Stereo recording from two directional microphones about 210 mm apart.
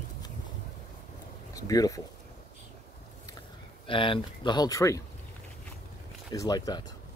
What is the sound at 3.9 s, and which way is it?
Speech, 25° left (ahead or behind).